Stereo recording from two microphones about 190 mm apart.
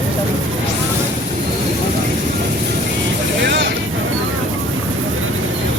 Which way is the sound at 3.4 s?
65° right (ahead or behind).